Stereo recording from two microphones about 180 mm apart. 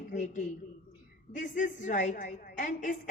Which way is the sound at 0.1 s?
45° left (ahead or behind).